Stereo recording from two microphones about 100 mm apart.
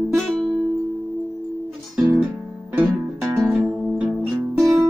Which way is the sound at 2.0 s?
20° right (ahead or behind).